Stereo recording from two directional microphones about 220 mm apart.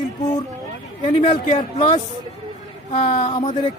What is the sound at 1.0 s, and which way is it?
Speech, 35° left (ahead or behind).